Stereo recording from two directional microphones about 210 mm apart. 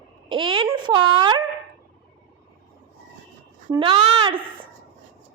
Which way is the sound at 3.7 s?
25° right (ahead or behind).